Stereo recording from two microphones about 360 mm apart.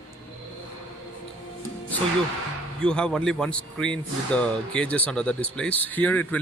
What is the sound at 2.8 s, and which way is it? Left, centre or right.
Speech, centre.